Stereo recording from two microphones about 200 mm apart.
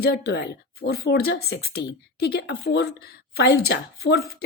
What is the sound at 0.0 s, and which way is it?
Speech, 55° left (ahead or behind).